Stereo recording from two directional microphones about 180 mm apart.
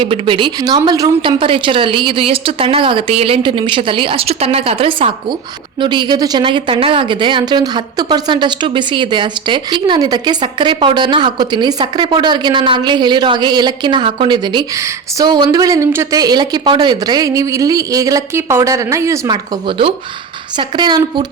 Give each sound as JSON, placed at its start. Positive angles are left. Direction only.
{"t": 0.0, "sound": "speech", "side_deg": -30}
{"t": 20.6, "sound": "speech", "side_deg": -25}